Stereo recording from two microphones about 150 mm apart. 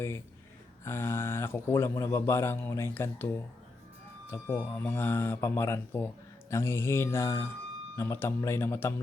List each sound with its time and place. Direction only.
0.9 s speech: 15° left (ahead or behind)